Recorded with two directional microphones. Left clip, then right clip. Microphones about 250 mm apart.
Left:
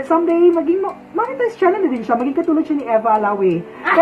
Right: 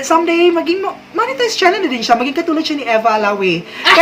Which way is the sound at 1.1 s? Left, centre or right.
Right.